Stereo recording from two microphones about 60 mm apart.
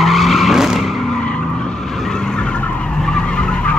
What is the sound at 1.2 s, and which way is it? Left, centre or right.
Vehicle, centre.